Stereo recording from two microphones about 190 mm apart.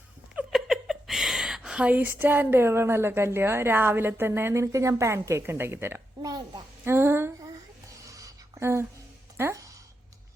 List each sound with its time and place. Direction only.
0.3 s speech: centre (ahead or behind)
8.0 s a sound: 15° right (ahead or behind)
9.4 s music: 15° right (ahead or behind)